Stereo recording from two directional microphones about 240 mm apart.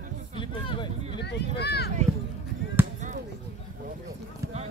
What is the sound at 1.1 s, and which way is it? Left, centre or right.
Speech, left.